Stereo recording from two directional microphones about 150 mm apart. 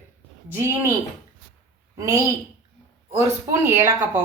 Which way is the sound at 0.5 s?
20° right (ahead or behind).